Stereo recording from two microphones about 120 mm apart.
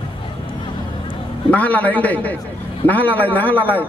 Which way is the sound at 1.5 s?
10° left (ahead or behind).